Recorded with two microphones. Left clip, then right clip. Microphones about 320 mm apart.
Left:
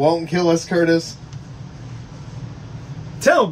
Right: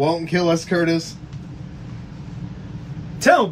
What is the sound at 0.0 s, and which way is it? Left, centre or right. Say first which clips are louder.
Speech: left 2 dB; centre.